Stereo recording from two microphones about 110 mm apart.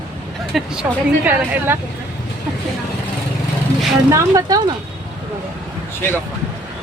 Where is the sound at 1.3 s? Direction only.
15° right (ahead or behind).